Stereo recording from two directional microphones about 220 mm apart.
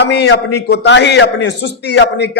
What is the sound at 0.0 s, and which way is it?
A man's voice, 50° left (ahead or behind).